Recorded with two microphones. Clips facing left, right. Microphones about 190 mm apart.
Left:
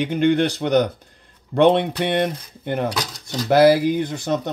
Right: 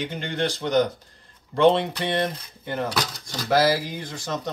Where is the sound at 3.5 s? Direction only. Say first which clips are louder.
Left 7 dB; 60° left (ahead or behind).